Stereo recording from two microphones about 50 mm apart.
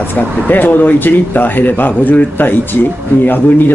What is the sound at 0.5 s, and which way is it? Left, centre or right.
Speech, left.